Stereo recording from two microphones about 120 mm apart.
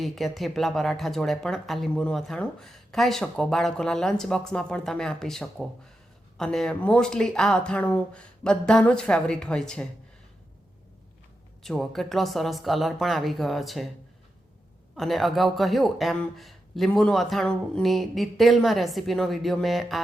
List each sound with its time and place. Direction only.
0.0 s speech: centre (ahead or behind)
11.6 s speech: 5° left (ahead or behind)
14.9 s speech: centre (ahead or behind)